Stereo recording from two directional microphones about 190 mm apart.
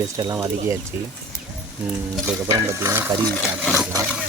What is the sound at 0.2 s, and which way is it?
Stir, 20° right (ahead or behind).